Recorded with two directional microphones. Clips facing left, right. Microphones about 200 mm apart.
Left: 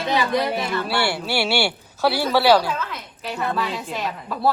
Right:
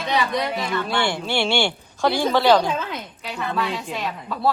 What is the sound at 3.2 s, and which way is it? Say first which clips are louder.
A woman's voice: left 2 dB; centre (ahead or behind).